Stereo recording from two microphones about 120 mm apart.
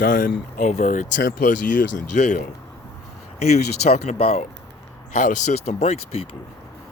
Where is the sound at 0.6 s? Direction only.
80° left.